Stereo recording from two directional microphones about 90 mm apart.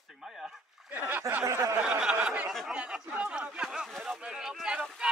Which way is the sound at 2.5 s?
Centre (ahead or behind).